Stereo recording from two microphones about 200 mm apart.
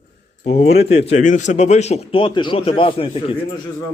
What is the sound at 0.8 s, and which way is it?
A man's voice, 30° left (ahead or behind).